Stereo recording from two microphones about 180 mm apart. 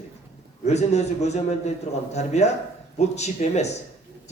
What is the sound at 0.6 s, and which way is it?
Speech, 40° left (ahead or behind).